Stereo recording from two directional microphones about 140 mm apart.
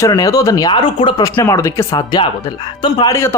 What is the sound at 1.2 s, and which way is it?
Speech, 20° left (ahead or behind).